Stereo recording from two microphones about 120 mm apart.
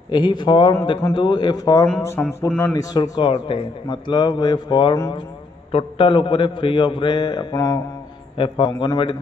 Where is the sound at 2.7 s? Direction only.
35° left (ahead or behind).